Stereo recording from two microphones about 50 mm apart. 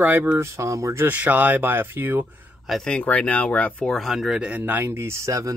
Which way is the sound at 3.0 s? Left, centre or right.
Left.